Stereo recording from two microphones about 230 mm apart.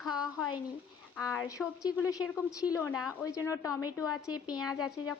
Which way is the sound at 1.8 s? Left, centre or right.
Centre.